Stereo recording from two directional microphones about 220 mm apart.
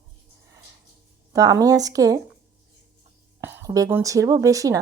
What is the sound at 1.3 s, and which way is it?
Speech, 15° right (ahead or behind).